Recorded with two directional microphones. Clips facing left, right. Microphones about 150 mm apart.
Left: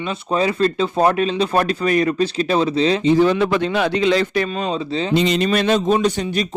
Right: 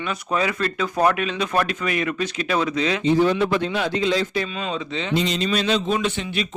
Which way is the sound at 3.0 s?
90° left.